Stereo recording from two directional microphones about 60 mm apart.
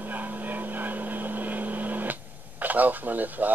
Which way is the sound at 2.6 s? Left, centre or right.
Right.